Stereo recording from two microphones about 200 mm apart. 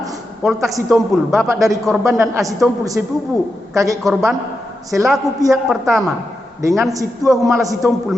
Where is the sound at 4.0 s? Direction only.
Centre (ahead or behind).